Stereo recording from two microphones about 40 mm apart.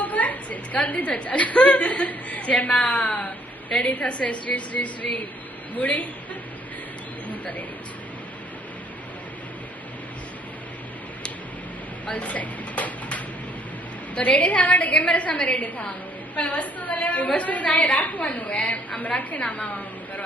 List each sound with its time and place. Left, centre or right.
0.0 s a woman's voice: left
12.1 s dishes: left
14.2 s a woman's voice: left